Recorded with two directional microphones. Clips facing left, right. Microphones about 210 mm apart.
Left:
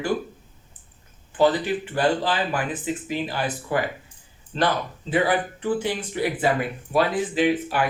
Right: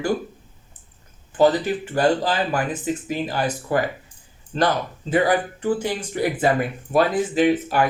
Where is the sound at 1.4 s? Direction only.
45° right (ahead or behind).